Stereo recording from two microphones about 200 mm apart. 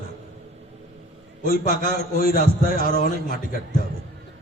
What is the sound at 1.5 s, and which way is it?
A man's voice, 45° left (ahead or behind).